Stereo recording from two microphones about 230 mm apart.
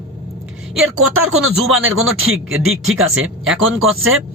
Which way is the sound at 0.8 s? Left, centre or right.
Right.